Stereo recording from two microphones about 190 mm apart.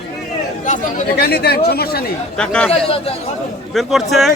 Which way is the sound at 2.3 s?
5° left (ahead or behind).